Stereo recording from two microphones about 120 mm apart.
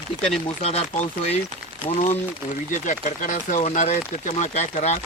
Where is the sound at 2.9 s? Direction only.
90° left.